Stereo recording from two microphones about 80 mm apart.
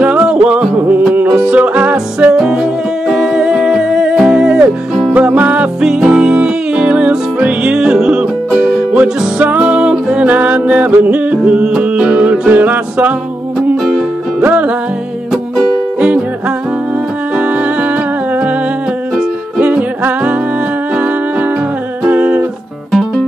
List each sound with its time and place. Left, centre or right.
0.0 s music: centre
2.1 s humming: centre
4.2 s music: centre
14.4 s music: right
16.0 s music: centre
19.6 s music: right
22.8 s music: centre